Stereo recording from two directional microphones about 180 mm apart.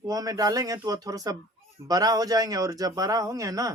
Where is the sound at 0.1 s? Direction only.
20° right (ahead or behind).